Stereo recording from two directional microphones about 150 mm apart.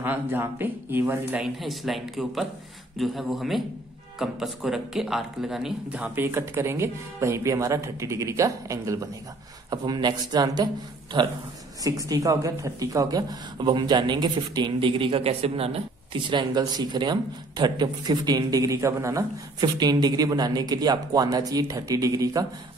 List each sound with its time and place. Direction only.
0.0 s speech: 15° right (ahead or behind)
1.4 s speech: centre (ahead or behind); by 22.5 s 25° right (ahead or behind)